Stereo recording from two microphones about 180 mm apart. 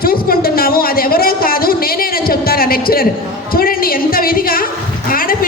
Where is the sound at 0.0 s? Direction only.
55° left (ahead or behind).